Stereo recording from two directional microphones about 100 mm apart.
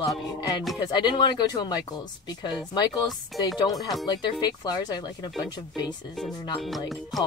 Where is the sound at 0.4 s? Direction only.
40° left (ahead or behind).